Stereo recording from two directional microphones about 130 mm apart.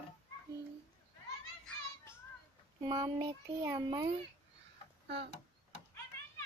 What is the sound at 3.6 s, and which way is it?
Speech, 30° right (ahead or behind).